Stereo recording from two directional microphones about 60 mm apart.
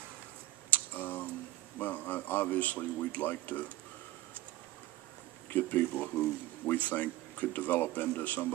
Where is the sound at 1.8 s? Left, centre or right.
Left.